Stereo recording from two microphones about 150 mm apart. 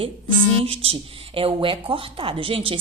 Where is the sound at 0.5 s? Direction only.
40° right (ahead or behind).